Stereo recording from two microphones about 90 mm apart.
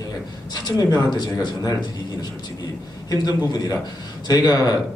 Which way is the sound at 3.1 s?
50° left (ahead or behind).